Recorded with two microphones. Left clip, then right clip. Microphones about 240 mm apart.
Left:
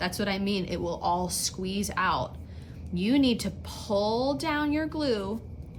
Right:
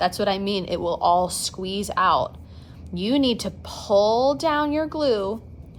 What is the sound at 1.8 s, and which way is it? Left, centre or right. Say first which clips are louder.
A woman's voice: right 8 dB; centre.